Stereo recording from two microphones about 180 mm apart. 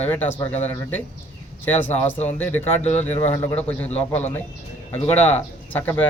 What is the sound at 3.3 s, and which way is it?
A man's voice, 15° left (ahead or behind).